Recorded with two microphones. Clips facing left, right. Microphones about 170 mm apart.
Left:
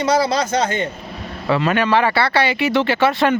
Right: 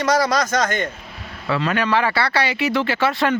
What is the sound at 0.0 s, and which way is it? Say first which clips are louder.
Speech: left 1 dB; 30° left (ahead or behind).